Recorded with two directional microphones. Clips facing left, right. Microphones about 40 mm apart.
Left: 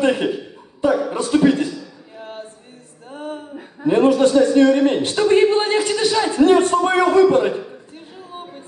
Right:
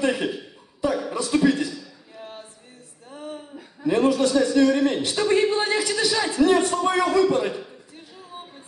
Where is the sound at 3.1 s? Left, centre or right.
Left.